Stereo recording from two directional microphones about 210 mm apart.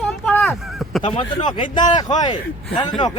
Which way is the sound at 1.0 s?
25° left (ahead or behind).